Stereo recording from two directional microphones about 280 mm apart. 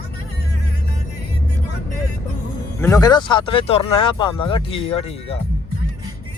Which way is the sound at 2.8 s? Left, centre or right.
Centre.